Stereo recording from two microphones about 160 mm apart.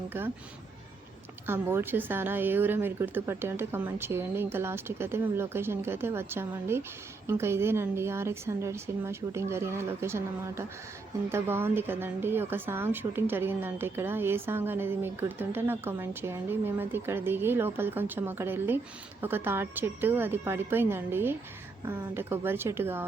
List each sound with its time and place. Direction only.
1.5 s a woman's voice: 15° right (ahead or behind)